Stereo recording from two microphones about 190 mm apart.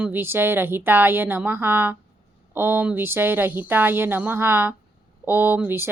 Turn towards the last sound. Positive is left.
turn(degrees=-10)  # may be behind; listen again after turning